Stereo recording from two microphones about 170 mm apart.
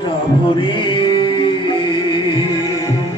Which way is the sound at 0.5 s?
30° left (ahead or behind).